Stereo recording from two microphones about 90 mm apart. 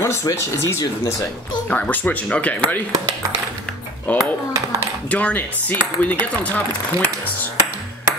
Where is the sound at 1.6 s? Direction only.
15° left (ahead or behind).